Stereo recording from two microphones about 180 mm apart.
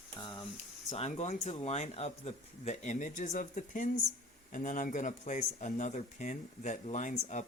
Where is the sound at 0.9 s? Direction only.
40° left (ahead or behind).